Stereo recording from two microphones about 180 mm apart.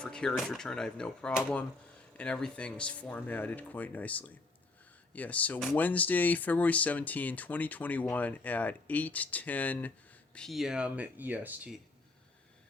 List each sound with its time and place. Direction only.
0.0 s speech: 5° left (ahead or behind)